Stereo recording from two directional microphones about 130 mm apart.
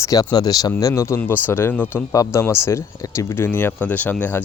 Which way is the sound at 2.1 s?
25° left (ahead or behind).